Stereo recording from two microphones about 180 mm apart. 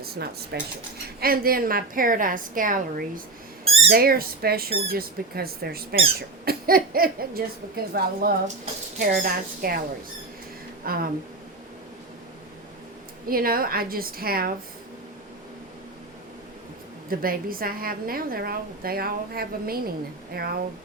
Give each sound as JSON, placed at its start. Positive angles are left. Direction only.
{"t": 0.0, "sound": "a sound", "side_deg": -60}
{"t": 0.5, "sound": "a woman's voice", "side_deg": -65}
{"t": 3.6, "sound": "a sound", "side_deg": -30}
{"t": 3.8, "sound": "a woman's voice", "side_deg": -60}
{"t": 10.8, "sound": "a woman's voice", "side_deg": -55}
{"t": 13.2, "sound": "a woman's voice", "side_deg": -55}
{"t": 17.1, "sound": "a woman's voice", "side_deg": -55}